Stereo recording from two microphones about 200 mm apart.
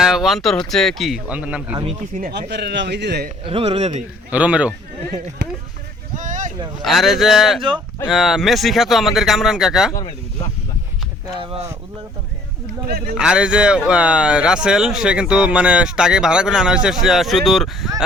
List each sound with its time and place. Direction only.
0.0 s speech: centre (ahead or behind)
1.7 s speech: 30° right (ahead or behind)
2.5 s speech: 55° right (ahead or behind)
3.4 s speech: 25° right (ahead or behind)
4.3 s speech: 5° right (ahead or behind)
6.1 s boat: 40° right (ahead or behind)
6.8 s speech: centre (ahead or behind)
13.1 s speech: 5° right (ahead or behind)